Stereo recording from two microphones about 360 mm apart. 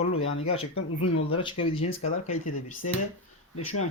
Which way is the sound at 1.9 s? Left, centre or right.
Left.